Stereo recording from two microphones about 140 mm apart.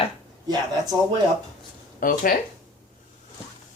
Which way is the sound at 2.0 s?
90° left.